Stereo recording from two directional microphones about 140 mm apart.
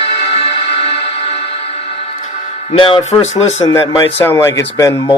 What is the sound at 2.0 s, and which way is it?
Music, 50° left (ahead or behind).